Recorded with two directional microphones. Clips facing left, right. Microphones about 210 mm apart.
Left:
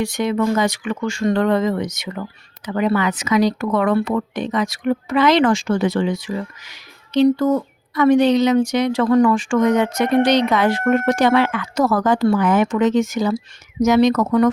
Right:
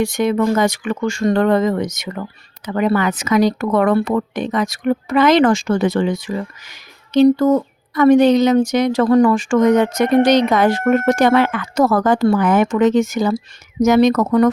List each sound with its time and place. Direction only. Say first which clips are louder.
0.0 s speech: right 3 dB; 50° right (ahead or behind)